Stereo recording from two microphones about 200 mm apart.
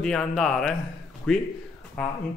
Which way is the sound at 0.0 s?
5° left (ahead or behind).